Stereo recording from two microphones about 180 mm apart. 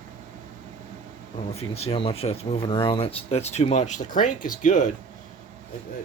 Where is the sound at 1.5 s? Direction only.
35° left (ahead or behind).